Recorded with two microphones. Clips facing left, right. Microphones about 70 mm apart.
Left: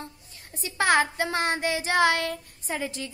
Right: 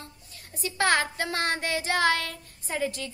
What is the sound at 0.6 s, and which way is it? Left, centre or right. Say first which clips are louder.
Speech: left 2 dB; centre.